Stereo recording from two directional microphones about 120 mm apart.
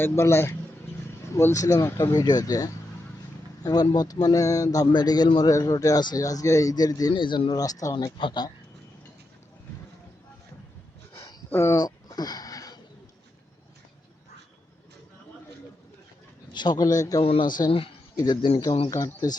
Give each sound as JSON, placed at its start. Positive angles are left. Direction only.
{"t": 0.0, "sound": "speech", "side_deg": 20}
{"t": 2.1, "sound": "speech", "side_deg": 35}
{"t": 7.1, "sound": "speech", "side_deg": 40}
{"t": 11.1, "sound": "a sound", "side_deg": 35}
{"t": 11.5, "sound": "speech", "side_deg": 20}
{"t": 11.8, "sound": "a sound", "side_deg": 30}
{"t": 16.5, "sound": "speech", "side_deg": 35}
{"t": 18.6, "sound": "speech", "side_deg": 40}
{"t": 18.9, "sound": "speech", "side_deg": 25}